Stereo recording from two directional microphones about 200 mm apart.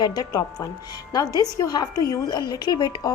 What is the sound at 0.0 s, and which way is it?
A woman's voice, 20° left (ahead or behind).